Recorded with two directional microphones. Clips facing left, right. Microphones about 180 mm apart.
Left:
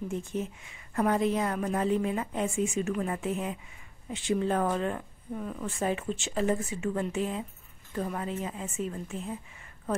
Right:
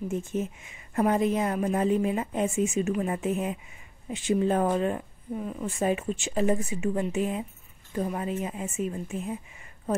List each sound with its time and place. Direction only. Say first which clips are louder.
0.3 s a woman's voice: right 3 dB; 20° right (ahead or behind)